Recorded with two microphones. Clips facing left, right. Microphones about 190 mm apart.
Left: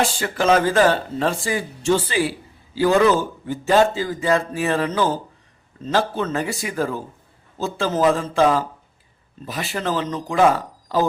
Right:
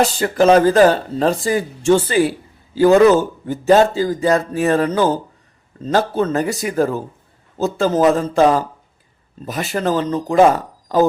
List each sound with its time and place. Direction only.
0.0 s a man's voice: 40° right (ahead or behind)